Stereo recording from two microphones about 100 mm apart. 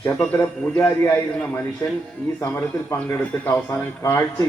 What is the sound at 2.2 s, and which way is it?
A man's voice, 25° left (ahead or behind).